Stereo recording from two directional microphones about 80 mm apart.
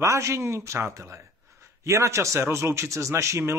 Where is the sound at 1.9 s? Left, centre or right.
Right.